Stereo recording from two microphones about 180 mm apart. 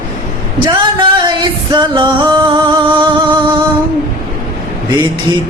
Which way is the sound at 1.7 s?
25° right (ahead or behind).